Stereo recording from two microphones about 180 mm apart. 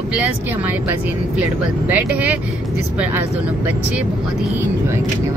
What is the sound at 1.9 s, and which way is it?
Speech, 10° right (ahead or behind).